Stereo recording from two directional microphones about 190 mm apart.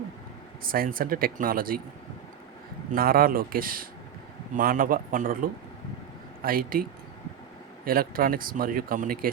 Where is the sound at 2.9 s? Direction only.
50° right (ahead or behind).